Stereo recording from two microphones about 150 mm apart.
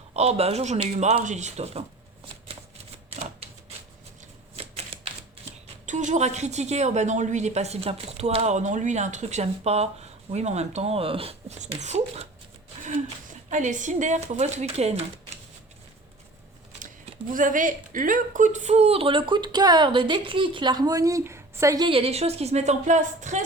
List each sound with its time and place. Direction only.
0.1 s speech: 45° right (ahead or behind)
4.5 s typewriter: 45° right (ahead or behind)
5.8 s speech: 55° right (ahead or behind)
13.5 s speech: 55° right (ahead or behind)
16.8 s speech: 60° right (ahead or behind); by 21.8 s 20° right (ahead or behind)
21.8 s speech: 40° right (ahead or behind)